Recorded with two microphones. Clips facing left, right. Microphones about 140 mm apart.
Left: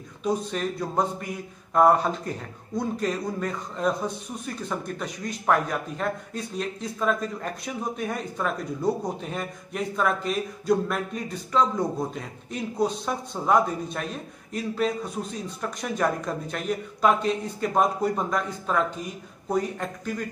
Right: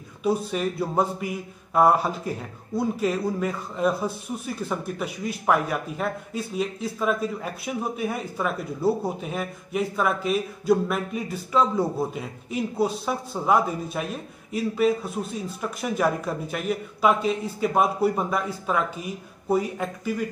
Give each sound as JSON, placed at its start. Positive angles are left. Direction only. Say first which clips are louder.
{"t": 0.2, "sound": "a man's voice", "louder": "right 2 dB", "side_deg": -5}